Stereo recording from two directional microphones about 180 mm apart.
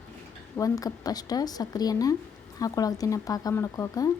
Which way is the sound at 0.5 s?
20° left (ahead or behind).